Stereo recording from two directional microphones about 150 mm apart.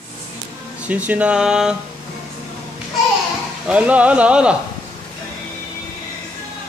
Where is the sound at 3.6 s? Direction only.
10° right (ahead or behind).